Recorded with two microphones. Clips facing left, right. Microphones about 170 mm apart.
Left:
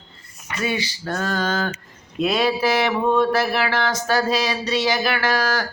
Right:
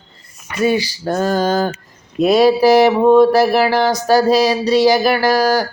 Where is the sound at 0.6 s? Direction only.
40° right (ahead or behind).